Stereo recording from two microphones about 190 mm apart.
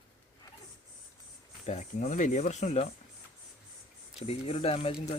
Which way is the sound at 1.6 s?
40° left (ahead or behind).